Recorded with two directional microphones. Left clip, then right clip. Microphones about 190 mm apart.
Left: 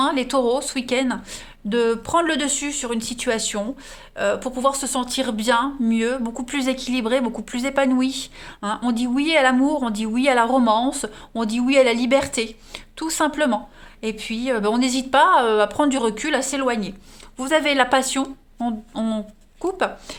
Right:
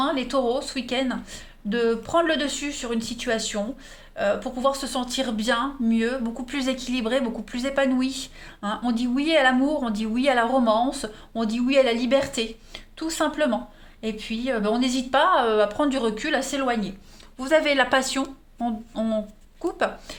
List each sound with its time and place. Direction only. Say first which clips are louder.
0.0 s a woman's voice: left 4 dB; 45° left (ahead or behind); by 20.1 s 25° left (ahead or behind)